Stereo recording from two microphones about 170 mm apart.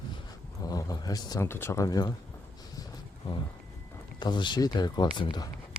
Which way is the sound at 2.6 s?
20° left (ahead or behind).